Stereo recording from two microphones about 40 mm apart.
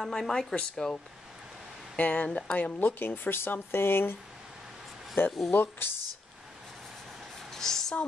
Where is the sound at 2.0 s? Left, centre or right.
Left.